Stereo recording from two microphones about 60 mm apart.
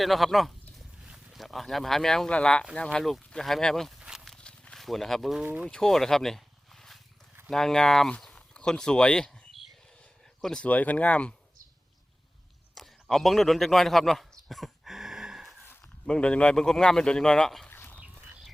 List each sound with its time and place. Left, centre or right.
0.0 s speech: centre
3.0 s speech: centre
4.4 s a sound: centre
4.8 s speech: centre
10.6 s speech: left
12.7 s a sound: centre
16.0 s speech: centre
16.6 s speech: centre
17.7 s a sound: left